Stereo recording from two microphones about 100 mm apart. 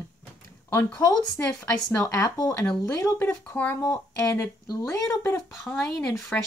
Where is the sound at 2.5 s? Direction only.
5° left (ahead or behind).